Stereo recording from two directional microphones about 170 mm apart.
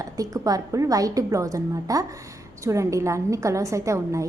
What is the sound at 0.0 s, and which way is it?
A woman's voice, 20° right (ahead or behind).